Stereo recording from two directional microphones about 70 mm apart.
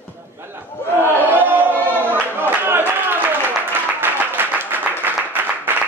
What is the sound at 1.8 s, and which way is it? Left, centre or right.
Choir, right.